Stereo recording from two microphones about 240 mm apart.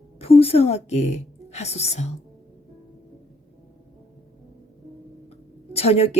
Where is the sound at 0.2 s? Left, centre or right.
Left.